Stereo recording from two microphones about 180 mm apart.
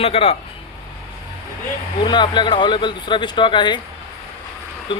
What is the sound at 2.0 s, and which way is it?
Speech, 25° left (ahead or behind).